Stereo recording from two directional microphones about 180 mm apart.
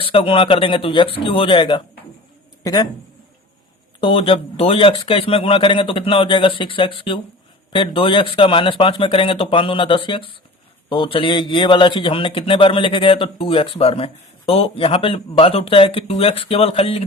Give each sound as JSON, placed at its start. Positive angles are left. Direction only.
{"t": 0.0, "sound": "a man's voice", "side_deg": 30}
{"t": 4.0, "sound": "a man's voice", "side_deg": 30}